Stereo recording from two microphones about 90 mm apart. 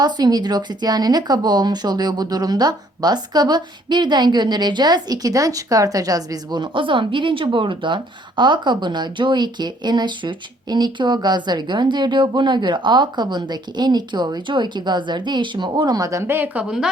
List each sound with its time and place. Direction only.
0.0 s speech: 50° right (ahead or behind)
16.3 s speech: 20° right (ahead or behind)
16.6 s speech: 5° right (ahead or behind)